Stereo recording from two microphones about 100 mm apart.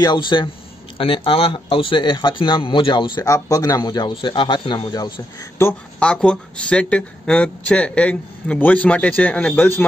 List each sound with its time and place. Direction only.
0.0 s speech: 50° left (ahead or behind)
0.9 s speech: 60° left (ahead or behind)
3.3 s speech: 35° left (ahead or behind)
4.1 s speech: 55° left (ahead or behind)
5.6 s speech: 25° left (ahead or behind)
5.9 s speech: 10° left (ahead or behind)